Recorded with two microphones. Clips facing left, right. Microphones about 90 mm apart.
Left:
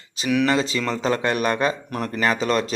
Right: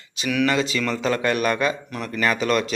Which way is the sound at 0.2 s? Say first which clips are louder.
Left 1 dB; 25° left (ahead or behind).